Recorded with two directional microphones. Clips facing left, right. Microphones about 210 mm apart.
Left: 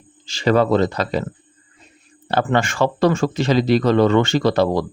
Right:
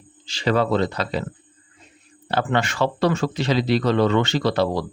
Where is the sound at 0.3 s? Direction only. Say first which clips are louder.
Left 4 dB; 45° left (ahead or behind).